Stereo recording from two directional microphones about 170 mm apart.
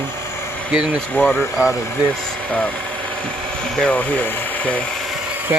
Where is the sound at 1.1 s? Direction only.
10° left (ahead or behind).